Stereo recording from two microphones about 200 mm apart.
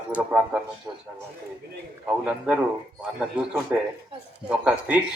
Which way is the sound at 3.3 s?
5° right (ahead or behind).